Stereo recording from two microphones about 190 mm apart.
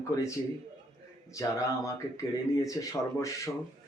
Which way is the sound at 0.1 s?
15° left (ahead or behind).